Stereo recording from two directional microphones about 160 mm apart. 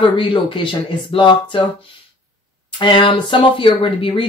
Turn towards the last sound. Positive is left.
turn(degrees=35)  # may be behind; listen again after turning